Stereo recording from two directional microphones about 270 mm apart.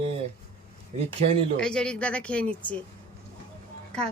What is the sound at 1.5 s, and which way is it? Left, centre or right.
A woman's voice, centre.